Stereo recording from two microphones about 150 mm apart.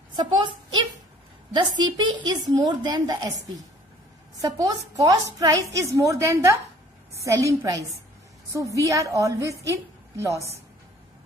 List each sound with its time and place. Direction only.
1.5 s a woman's voice: 30° right (ahead or behind)